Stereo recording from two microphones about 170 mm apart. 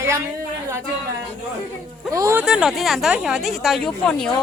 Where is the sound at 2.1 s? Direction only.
20° right (ahead or behind).